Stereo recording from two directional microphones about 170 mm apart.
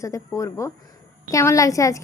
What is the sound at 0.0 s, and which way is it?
A woman's voice, 20° left (ahead or behind).